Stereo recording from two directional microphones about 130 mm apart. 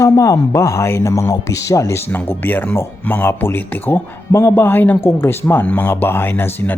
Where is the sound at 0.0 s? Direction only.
25° left (ahead or behind).